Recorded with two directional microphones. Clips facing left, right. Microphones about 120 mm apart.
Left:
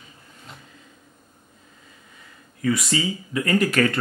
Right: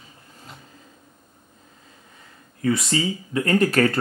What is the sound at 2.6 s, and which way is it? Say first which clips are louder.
Speech: right 1 dB; 30° right (ahead or behind).